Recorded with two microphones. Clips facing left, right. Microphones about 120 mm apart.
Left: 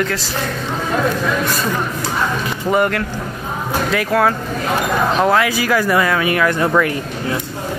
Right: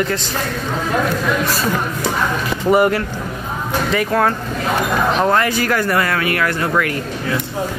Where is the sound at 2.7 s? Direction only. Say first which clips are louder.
Right 3 dB; 5° right (ahead or behind); by 7.3 s 20° left (ahead or behind).